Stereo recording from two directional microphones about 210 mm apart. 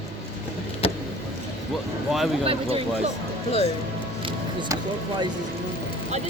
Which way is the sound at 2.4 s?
25° right (ahead or behind).